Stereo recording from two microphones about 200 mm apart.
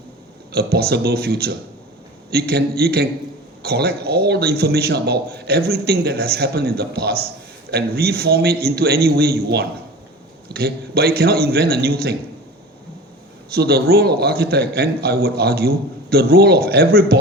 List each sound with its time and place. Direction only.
0.5 s a man's voice: 50° right (ahead or behind)
13.5 s a man's voice: 50° right (ahead or behind)